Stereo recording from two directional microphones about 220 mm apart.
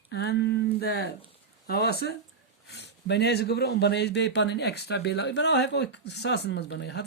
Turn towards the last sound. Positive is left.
turn(degrees=50)  # may be behind; listen again after turning